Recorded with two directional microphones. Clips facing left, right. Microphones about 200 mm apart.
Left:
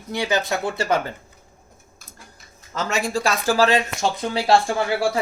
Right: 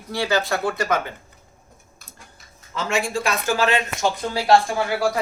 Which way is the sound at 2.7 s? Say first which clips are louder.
Even; 40° left (ahead or behind).